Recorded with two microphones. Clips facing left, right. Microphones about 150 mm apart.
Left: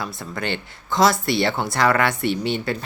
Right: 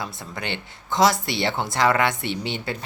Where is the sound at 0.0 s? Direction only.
20° right (ahead or behind).